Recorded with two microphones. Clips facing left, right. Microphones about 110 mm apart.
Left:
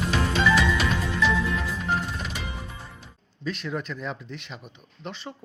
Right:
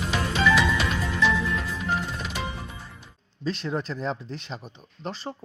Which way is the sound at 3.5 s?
30° right (ahead or behind).